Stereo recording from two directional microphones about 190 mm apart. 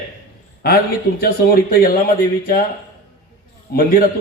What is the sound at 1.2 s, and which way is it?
Speech, 50° left (ahead or behind).